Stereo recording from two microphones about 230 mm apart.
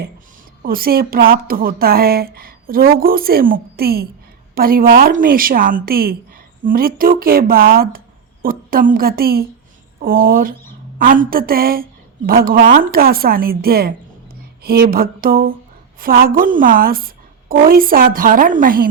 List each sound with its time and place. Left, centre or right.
0.6 s a woman's voice: right